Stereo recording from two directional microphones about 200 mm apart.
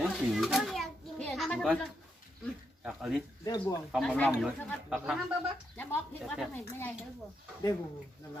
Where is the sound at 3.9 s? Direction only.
5° left (ahead or behind).